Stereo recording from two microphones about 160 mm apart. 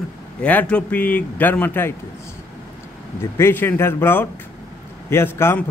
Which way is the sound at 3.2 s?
15° left (ahead or behind).